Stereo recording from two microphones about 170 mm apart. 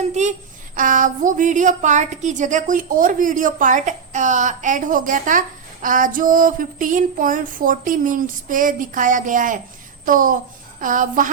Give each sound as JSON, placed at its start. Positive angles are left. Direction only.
{"t": 0.0, "sound": "a woman's voice", "side_deg": -45}